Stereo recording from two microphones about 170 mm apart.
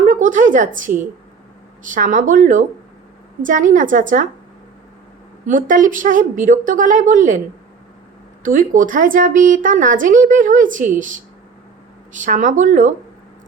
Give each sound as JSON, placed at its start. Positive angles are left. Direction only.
{"t": 0.0, "sound": "a sound", "side_deg": -50}
{"t": 1.8, "sound": "speech", "side_deg": -50}
{"t": 5.5, "sound": "speech", "side_deg": -50}
{"t": 8.4, "sound": "speech", "side_deg": -50}